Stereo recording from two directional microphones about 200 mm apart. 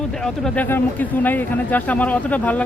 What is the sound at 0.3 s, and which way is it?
Speech, 5° left (ahead or behind).